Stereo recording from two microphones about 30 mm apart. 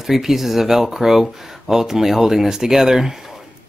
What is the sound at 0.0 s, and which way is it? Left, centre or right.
Speech, centre.